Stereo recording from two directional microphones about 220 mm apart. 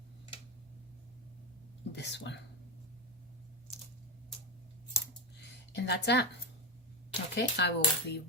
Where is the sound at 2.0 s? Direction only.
50° left (ahead or behind).